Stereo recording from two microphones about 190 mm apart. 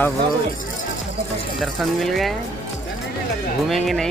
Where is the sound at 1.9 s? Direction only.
Centre (ahead or behind).